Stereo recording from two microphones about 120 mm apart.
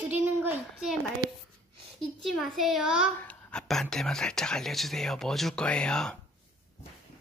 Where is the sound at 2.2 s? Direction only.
Centre (ahead or behind).